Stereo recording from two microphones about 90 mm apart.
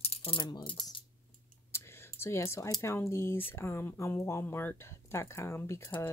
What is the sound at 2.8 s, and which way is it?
Speech, 30° left (ahead or behind).